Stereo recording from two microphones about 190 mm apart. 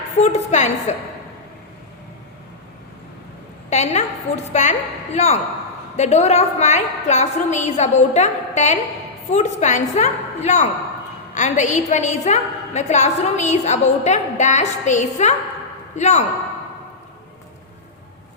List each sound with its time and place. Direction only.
0.2 s a woman's voice: 35° left (ahead or behind)
3.7 s a woman's voice: 35° left (ahead or behind)